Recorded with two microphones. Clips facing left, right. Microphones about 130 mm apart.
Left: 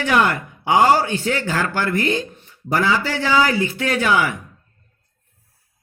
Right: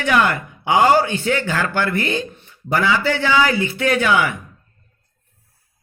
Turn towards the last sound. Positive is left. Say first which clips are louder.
# right 2 dB
turn(degrees=35)  # may be behind; listen again after turning